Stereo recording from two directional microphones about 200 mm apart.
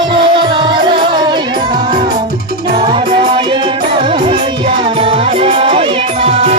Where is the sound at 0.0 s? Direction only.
25° right (ahead or behind).